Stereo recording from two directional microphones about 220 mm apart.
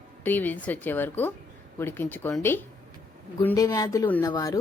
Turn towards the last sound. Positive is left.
turn(degrees=15)  # may be behind; listen again after turning